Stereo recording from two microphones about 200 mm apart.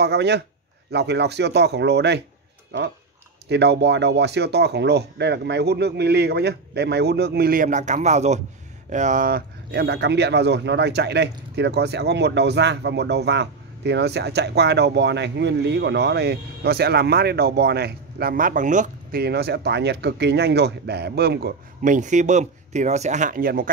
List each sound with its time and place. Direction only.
0.0 s speech: 55° right (ahead or behind)
9.7 s speech: 55° right (ahead or behind); by 19.2 s 40° right (ahead or behind)
19.2 s speech: 55° right (ahead or behind)